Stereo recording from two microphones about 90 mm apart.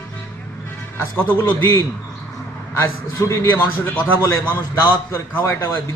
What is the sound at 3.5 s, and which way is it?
Speech, 20° left (ahead or behind).